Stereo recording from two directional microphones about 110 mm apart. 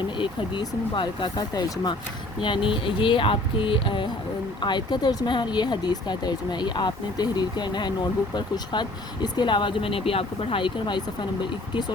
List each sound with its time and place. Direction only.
0.2 s speech: 45° left (ahead or behind)